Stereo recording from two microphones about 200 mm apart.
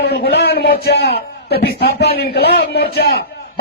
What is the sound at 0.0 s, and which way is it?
A man's voice, 55° left (ahead or behind).